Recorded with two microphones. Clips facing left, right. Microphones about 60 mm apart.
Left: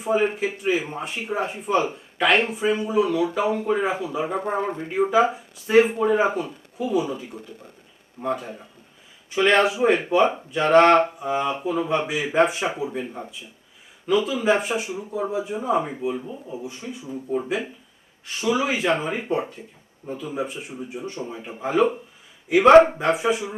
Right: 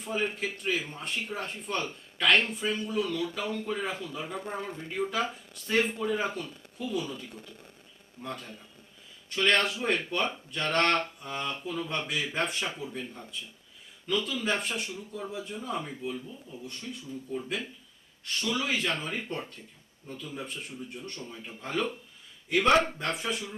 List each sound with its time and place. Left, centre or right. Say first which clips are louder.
0.0 s speech: left 10 dB; centre
4.3 s speech: left 11 dB; left
5.1 s speech: left 12 dB; centre
16.6 s speech: left 7 dB; centre
18.3 s speech: left 8 dB; centre
22.7 s speech: left 13 dB; left
23.0 s speech: left 11 dB; centre